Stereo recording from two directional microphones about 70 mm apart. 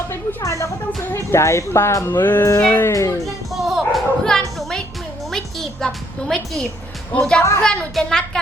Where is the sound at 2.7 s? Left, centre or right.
Left.